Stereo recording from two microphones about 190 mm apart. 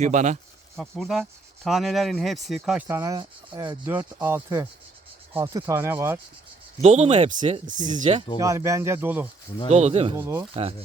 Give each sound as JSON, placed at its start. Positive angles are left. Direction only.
{"t": 0.0, "sound": "speech", "side_deg": -40}
{"t": 0.8, "sound": "speech", "side_deg": 0}
{"t": 4.4, "sound": "speech", "side_deg": -25}
{"t": 6.8, "sound": "speech", "side_deg": -35}
{"t": 8.4, "sound": "speech", "side_deg": -15}
{"t": 9.6, "sound": "speech", "side_deg": -35}
{"t": 10.2, "sound": "speech", "side_deg": -15}
{"t": 10.5, "sound": "speech", "side_deg": -30}